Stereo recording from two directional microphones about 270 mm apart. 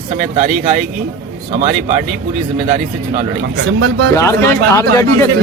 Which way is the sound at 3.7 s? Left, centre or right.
Right.